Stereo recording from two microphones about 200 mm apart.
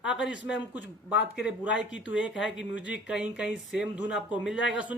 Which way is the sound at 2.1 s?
5° right (ahead or behind).